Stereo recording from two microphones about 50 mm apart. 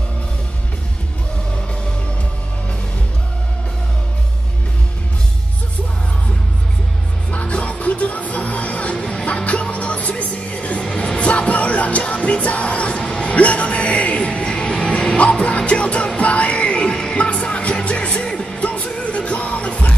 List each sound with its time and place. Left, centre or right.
7.2 s music: left
18.3 s music: centre
18.6 s music: left